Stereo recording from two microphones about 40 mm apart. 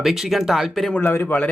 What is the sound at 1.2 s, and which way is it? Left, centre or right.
Speech, left.